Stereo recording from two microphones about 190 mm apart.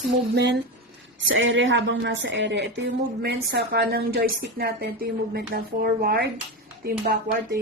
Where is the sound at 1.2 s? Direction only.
85° right; by 7.6 s 55° right (ahead or behind).